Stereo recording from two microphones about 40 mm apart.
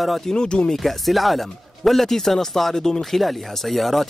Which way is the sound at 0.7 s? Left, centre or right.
Centre.